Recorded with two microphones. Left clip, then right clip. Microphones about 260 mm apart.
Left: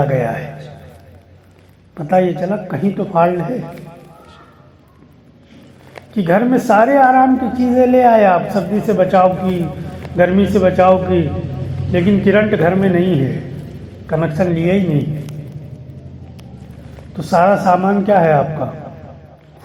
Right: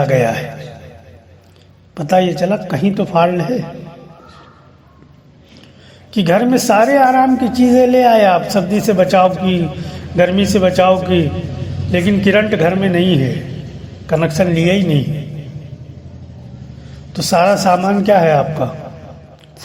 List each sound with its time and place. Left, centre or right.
0.0 s a man's voice: right
2.0 s a woman's voice: right
6.1 s a woman's voice: right
17.2 s a woman's voice: right